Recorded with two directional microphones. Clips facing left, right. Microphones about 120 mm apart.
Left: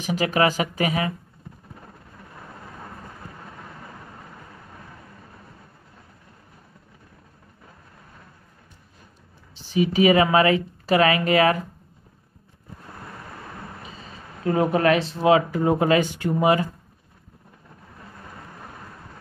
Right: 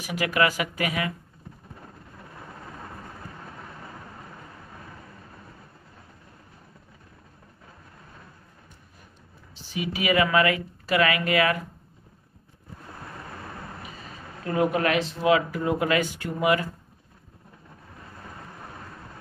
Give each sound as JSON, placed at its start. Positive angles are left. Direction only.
{"t": 0.0, "sound": "speech", "side_deg": 30}
{"t": 9.8, "sound": "speech", "side_deg": 30}
{"t": 14.4, "sound": "speech", "side_deg": 30}